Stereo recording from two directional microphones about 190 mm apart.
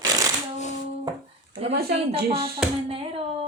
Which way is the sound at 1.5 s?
30° right (ahead or behind).